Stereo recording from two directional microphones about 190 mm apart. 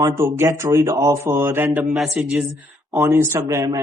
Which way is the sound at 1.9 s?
Centre (ahead or behind).